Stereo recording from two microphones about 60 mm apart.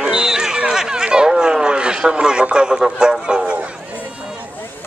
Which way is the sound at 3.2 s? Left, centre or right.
Centre.